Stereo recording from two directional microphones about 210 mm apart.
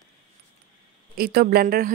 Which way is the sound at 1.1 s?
45° right (ahead or behind).